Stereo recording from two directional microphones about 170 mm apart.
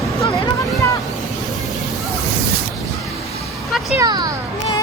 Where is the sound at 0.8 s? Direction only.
20° left (ahead or behind).